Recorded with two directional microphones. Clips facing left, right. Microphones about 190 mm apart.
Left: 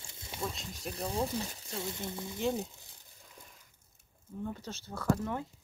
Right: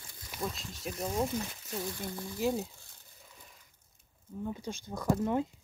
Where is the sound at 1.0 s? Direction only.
30° left (ahead or behind).